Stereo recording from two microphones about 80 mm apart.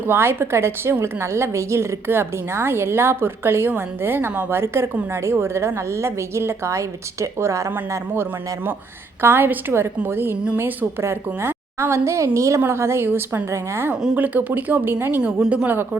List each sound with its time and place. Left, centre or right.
0.0 s a woman's voice: right
13.9 s speech: centre
14.2 s speech: right
15.2 s speech: centre